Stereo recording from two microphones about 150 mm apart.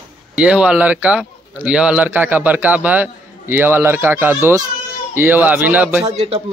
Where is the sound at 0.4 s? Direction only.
10° right (ahead or behind).